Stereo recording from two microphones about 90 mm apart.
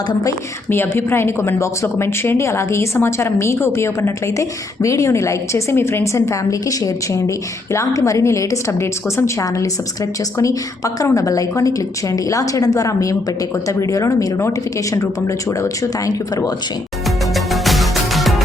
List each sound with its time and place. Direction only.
0.7 s a woman's voice: 25° left (ahead or behind); by 16.6 s 45° left (ahead or behind)
17.3 s music: centre (ahead or behind)